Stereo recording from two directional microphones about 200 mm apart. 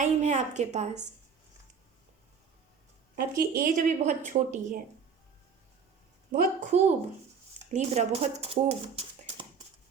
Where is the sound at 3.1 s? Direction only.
45° right (ahead or behind).